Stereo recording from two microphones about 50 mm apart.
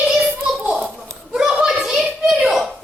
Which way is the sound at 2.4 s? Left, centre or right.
Centre.